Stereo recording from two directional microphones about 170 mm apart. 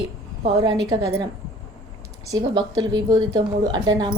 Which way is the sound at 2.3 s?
25° right (ahead or behind).